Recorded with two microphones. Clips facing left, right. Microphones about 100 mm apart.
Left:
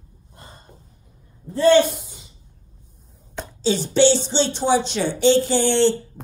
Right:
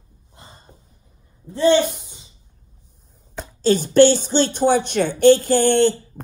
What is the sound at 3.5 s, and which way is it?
A woman's voice, 50° right (ahead or behind).